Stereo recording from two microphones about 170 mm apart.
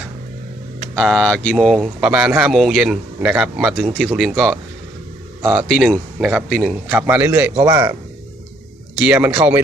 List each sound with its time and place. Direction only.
0.9 s speech: 5° right (ahead or behind)
4.1 s a man's voice: 5° right (ahead or behind)
5.5 s speech: centre (ahead or behind)
6.8 s a man's voice: 10° right (ahead or behind)
7.6 s speech: 25° right (ahead or behind)
9.0 s a man's voice: 10° right (ahead or behind)
9.3 s speech: 25° right (ahead or behind)